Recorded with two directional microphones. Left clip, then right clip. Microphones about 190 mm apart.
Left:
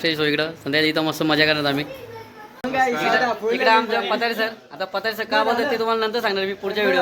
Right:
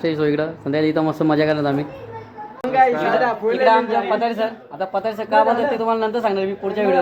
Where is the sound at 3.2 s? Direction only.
55° left (ahead or behind).